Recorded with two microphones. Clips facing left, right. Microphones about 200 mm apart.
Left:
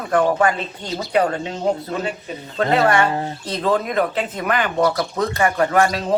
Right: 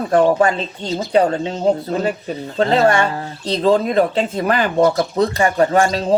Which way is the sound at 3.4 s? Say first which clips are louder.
Right 7 dB; 30° right (ahead or behind).